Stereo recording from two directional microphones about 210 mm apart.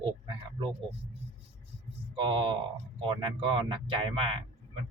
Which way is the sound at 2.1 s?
20° right (ahead or behind).